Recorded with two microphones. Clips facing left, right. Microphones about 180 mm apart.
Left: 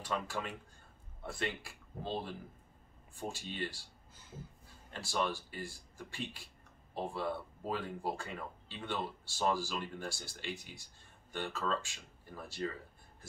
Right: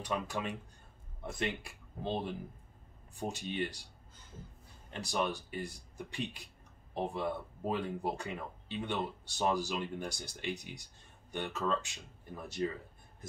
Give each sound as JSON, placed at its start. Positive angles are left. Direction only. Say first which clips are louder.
{"t": 0.0, "sound": "speech", "louder": "right 2 dB", "side_deg": -15}
{"t": 3.2, "sound": "speech", "louder": "right 4 dB", "side_deg": -20}
{"t": 4.9, "sound": "speech", "louder": "right 1 dB", "side_deg": -20}